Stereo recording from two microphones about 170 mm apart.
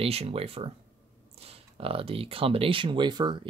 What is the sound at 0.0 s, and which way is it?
Speech, 35° right (ahead or behind).